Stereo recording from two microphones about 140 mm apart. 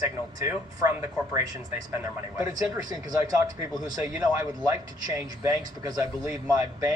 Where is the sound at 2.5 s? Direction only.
25° right (ahead or behind).